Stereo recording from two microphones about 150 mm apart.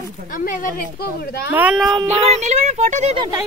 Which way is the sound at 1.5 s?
10° right (ahead or behind).